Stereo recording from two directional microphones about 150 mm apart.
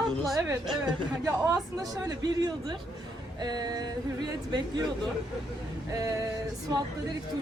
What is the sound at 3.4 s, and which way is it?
Speech, 25° right (ahead or behind).